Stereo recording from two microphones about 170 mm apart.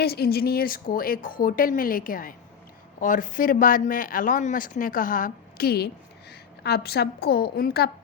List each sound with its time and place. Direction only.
0.0 s a woman's voice: 65° left (ahead or behind)